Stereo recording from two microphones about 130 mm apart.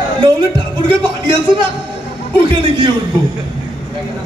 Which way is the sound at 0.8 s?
40° right (ahead or behind).